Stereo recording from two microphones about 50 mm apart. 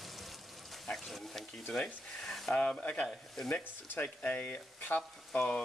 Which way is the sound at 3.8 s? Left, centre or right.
Left.